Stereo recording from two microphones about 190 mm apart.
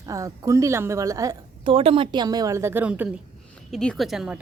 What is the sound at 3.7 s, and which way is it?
Speech, centre (ahead or behind).